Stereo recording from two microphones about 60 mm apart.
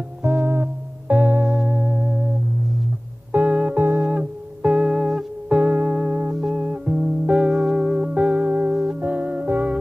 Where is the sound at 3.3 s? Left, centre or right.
Right.